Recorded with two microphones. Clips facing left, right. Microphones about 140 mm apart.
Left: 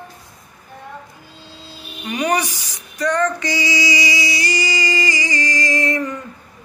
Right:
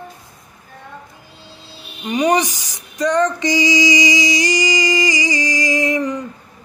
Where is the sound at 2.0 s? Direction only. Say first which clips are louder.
Right 4 dB; 15° right (ahead or behind).